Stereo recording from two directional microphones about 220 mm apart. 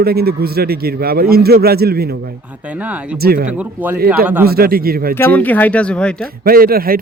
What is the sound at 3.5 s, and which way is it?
Speech, 5° right (ahead or behind).